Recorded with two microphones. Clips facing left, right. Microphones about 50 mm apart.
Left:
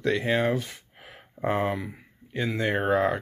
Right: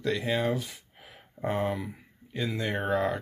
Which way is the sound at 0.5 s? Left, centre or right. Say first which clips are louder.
Left 4 dB; left.